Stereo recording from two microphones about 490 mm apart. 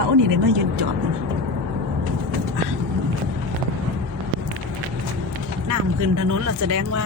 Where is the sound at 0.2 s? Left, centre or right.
Right.